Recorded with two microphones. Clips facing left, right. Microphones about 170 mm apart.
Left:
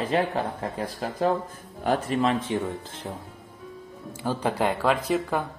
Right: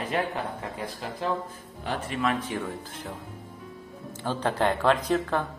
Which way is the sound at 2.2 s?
25° left (ahead or behind).